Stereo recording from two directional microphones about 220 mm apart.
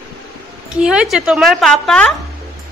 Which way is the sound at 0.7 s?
5° right (ahead or behind).